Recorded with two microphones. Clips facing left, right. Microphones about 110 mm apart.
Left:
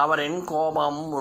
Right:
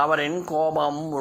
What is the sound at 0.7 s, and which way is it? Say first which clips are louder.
Music: right 1 dB; 20° left (ahead or behind).